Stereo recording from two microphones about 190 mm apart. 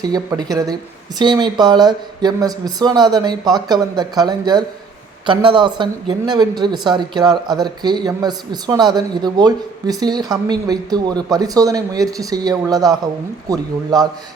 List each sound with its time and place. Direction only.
0.0 s speech: 20° right (ahead or behind)